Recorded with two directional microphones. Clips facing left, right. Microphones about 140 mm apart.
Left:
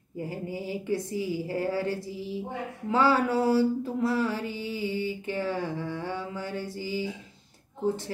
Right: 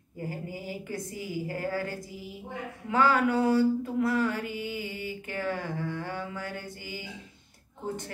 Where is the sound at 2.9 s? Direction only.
30° left (ahead or behind).